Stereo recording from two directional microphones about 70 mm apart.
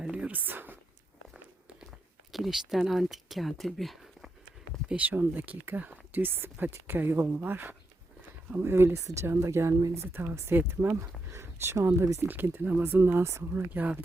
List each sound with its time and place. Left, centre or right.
0.0 s a sound: centre
0.3 s speech: right
2.3 s speech: centre
4.9 s speech: right
10.8 s speech: centre
11.3 s speech: right
12.2 s speech: right
13.7 s speech: right